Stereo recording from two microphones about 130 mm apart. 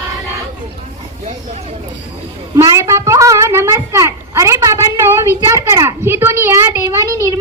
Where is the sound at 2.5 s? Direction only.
25° right (ahead or behind).